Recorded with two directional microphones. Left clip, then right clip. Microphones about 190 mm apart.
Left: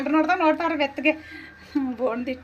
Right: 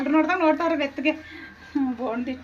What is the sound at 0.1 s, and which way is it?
A woman's voice, 15° left (ahead or behind).